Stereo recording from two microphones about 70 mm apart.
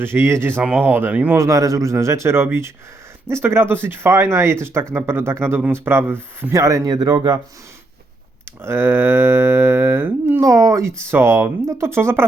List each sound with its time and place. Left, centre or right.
0.0 s speech: right
0.6 s speech: centre
1.4 s speech: right
6.5 s speech: right
6.9 s speech: right
8.6 s humming: right
10.4 s speech: right